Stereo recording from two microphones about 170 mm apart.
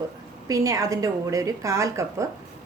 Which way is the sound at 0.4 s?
20° right (ahead or behind).